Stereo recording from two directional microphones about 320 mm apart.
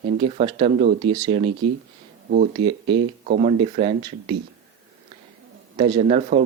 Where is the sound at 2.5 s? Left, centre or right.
Centre.